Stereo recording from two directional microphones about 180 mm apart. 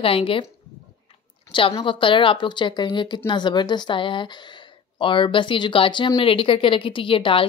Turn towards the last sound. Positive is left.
turn(degrees=30)  # may be behind; listen again after turning